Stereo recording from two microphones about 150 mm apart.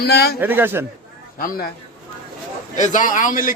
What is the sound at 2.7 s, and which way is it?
Speech, 55° left (ahead or behind).